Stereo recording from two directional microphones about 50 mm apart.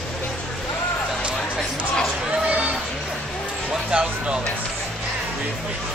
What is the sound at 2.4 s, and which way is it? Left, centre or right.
Music, right.